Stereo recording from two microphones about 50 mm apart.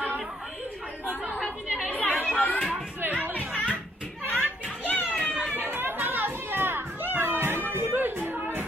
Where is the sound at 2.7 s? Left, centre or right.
Right.